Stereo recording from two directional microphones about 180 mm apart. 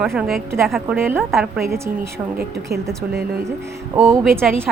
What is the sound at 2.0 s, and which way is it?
Speech, 65° right (ahead or behind).